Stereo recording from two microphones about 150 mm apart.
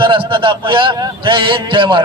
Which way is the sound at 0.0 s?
35° right (ahead or behind).